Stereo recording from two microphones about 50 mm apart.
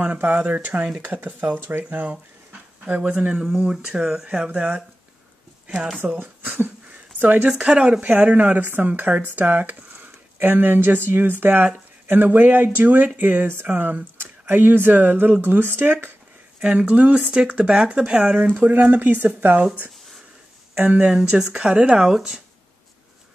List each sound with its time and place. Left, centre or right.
0.0 s speech: right
1.9 s speech: right
3.1 s speech: right
3.6 s speech: centre
6.1 s speech: right
7.2 s speech: right
7.4 s speech: centre; by 16.1 s right
16.6 s speech: right
20.8 s speech: right
21.2 s speech: centre